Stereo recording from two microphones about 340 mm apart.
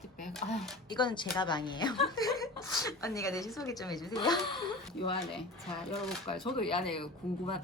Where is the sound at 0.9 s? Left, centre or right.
Centre.